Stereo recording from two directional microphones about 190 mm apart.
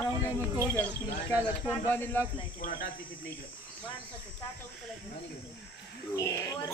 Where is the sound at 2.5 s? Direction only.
45° left (ahead or behind).